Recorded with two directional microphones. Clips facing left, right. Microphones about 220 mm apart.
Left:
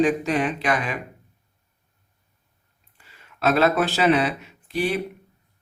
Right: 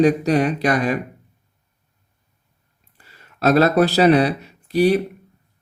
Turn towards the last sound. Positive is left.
turn(degrees=-40)  # may be behind; listen again after turning